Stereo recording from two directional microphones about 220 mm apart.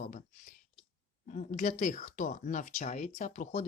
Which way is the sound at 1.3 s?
35° left (ahead or behind).